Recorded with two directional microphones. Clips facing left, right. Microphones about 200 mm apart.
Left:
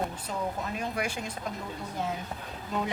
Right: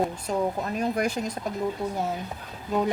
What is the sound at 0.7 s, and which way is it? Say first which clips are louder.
Speech: right 7 dB; 40° right (ahead or behind).